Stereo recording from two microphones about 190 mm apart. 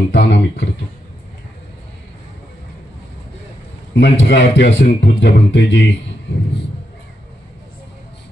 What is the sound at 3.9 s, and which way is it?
A man's voice, 65° left (ahead or behind).